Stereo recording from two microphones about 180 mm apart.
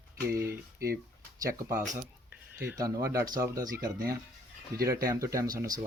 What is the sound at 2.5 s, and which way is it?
Speech, 15° right (ahead or behind).